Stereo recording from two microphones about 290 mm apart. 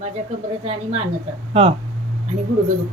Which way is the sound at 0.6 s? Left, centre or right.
Right.